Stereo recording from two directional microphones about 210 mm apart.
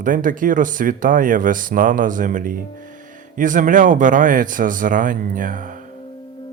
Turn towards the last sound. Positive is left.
turn(degrees=-40)  # may be behind; listen again after turning